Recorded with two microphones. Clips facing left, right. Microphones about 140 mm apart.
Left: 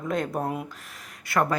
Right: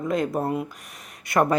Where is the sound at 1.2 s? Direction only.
20° right (ahead or behind).